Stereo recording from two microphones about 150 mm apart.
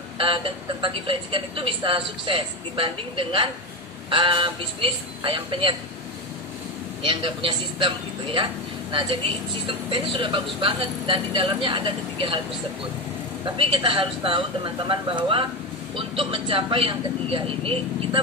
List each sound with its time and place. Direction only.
0.2 s a woman's voice: 35° right (ahead or behind)
7.0 s a woman's voice: 35° right (ahead or behind)
13.6 s a woman's voice: 35° right (ahead or behind)